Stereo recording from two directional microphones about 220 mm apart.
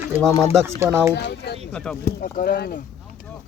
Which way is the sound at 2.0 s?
40° left (ahead or behind).